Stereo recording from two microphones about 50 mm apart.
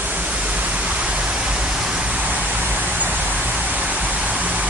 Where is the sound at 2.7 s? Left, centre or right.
Right.